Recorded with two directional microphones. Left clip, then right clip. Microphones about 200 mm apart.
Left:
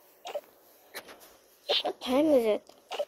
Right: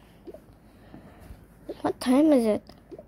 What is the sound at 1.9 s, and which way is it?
Speech, 10° right (ahead or behind).